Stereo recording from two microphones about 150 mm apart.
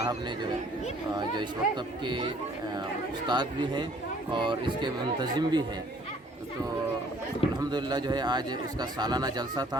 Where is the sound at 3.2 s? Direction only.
30° right (ahead or behind).